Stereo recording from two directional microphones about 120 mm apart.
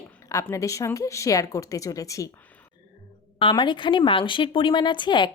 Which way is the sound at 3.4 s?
40° left (ahead or behind).